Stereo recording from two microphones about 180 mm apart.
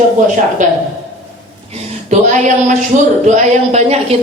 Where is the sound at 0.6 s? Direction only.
45° right (ahead or behind).